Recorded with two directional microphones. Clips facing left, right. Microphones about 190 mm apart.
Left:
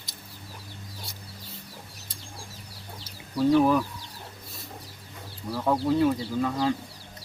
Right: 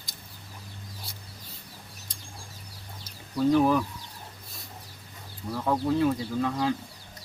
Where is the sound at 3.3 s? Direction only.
5° left (ahead or behind).